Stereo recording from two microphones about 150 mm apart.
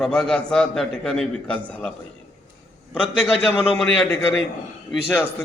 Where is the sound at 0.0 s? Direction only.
5° left (ahead or behind).